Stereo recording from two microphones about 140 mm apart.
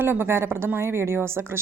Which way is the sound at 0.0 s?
15° right (ahead or behind).